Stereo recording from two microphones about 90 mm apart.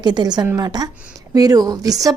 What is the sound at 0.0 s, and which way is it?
A woman's voice, 55° right (ahead or behind).